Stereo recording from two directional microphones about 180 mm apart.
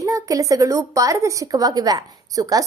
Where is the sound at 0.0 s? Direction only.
20° right (ahead or behind).